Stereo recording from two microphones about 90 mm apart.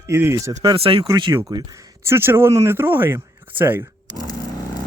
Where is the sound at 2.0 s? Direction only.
25° right (ahead or behind).